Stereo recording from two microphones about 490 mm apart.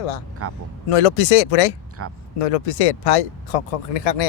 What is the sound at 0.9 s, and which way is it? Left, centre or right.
Speech, left.